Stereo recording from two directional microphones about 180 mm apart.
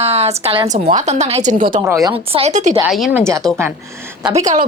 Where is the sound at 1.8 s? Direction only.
20° right (ahead or behind).